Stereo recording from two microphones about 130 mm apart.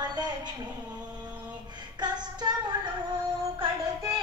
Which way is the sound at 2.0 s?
35° right (ahead or behind).